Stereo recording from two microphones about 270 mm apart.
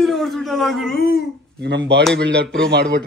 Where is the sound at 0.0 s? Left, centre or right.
Centre.